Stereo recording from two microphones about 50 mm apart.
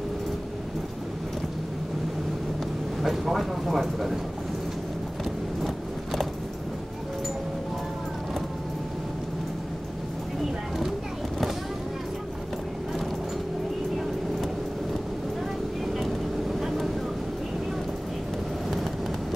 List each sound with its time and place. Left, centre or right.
3.0 s speech: centre
16.0 s vehicle: centre